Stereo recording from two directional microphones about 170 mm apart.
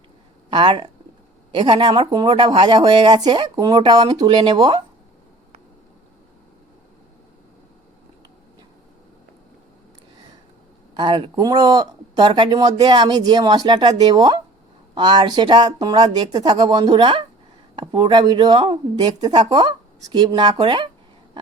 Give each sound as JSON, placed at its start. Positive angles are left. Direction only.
{"t": 0.5, "sound": "speech", "side_deg": -30}
{"t": 10.9, "sound": "speech", "side_deg": -30}